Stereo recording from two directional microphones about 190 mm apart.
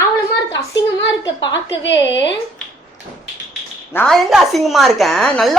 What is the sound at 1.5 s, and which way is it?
Speech, 70° left (ahead or behind).